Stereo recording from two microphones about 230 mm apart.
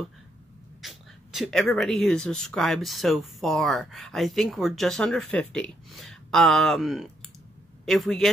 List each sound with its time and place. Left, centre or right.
0.8 s speech: centre